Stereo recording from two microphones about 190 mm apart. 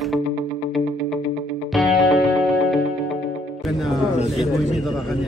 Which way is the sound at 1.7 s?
Centre (ahead or behind).